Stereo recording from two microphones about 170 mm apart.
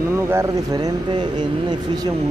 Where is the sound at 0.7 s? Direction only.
25° right (ahead or behind).